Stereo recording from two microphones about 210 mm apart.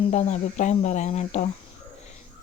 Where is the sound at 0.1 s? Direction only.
35° left (ahead or behind).